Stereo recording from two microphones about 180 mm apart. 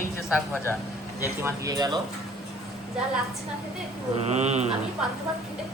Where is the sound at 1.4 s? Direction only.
20° right (ahead or behind).